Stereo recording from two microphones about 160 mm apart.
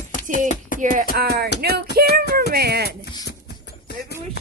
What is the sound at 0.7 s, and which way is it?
Music, 60° left (ahead or behind).